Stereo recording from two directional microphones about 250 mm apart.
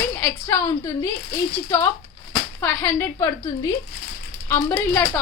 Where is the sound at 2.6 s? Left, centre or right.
Centre.